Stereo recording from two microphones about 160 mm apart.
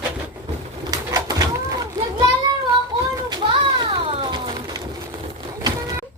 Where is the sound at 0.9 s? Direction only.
25° right (ahead or behind).